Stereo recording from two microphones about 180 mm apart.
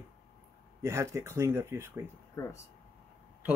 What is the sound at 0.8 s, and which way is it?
Speech, 15° right (ahead or behind).